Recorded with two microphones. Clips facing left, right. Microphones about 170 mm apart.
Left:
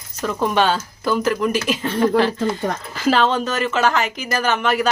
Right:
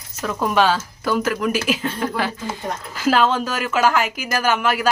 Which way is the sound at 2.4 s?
70° left (ahead or behind).